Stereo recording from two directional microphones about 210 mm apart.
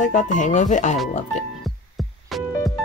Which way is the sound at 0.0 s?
35° left (ahead or behind).